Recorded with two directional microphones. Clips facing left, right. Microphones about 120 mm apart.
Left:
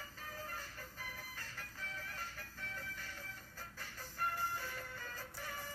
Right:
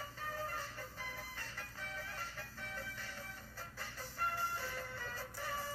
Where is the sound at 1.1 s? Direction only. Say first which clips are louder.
Right 2 dB; 30° right (ahead or behind).